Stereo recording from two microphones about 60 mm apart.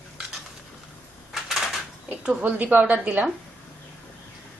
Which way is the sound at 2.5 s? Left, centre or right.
Right.